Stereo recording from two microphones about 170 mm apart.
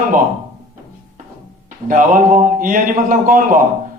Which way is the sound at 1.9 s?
50° right (ahead or behind).